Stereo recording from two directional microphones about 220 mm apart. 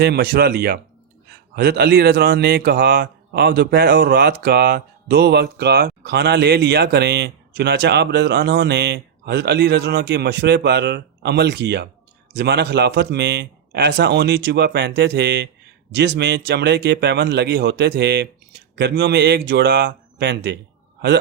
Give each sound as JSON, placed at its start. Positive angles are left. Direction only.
{"t": 0.0, "sound": "a man's voice", "side_deg": -45}